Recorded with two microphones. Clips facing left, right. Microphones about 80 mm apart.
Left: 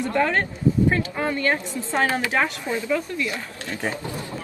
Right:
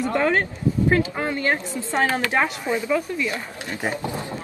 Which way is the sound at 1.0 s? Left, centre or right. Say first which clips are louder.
Even; centre.